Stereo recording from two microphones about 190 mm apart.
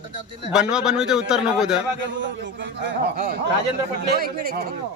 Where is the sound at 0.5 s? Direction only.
5° right (ahead or behind).